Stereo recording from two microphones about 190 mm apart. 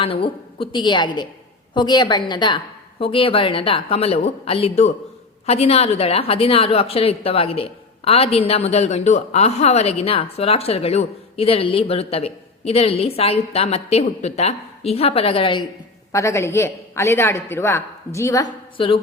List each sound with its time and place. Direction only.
0.0 s a woman's voice: 30° left (ahead or behind)
16.1 s a woman's voice: 15° left (ahead or behind)